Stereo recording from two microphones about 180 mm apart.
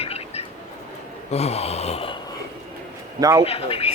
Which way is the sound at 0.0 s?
35° left (ahead or behind).